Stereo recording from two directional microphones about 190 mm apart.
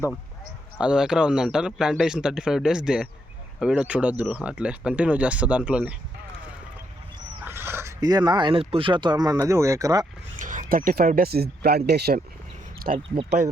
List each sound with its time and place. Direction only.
0.8 s a man's voice: 5° right (ahead or behind)
7.4 s speech: 10° right (ahead or behind)
10.3 s speech: 40° right (ahead or behind); by 12.2 s 55° right (ahead or behind)
12.9 s speech: 40° right (ahead or behind)